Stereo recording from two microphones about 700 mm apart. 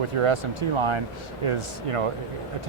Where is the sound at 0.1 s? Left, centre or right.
Right.